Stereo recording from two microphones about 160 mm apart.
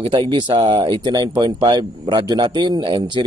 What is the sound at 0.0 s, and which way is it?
A man's voice, 30° right (ahead or behind).